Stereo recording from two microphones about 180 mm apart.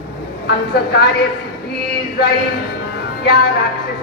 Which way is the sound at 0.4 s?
65° left (ahead or behind).